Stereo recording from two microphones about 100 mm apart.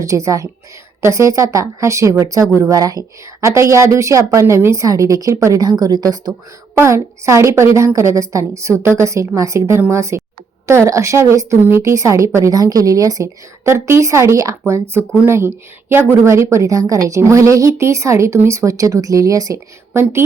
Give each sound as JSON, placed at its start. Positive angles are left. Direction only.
{"t": 0.0, "sound": "a woman's voice", "side_deg": -30}
{"t": 6.7, "sound": "a woman's voice", "side_deg": -30}
{"t": 19.9, "sound": "a woman's voice", "side_deg": -25}